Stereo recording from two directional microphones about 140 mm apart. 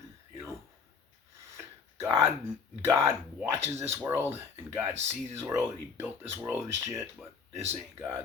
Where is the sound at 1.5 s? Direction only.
20° right (ahead or behind).